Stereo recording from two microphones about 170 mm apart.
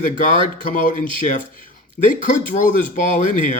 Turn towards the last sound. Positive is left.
turn(degrees=50)  # may be behind; listen again after turning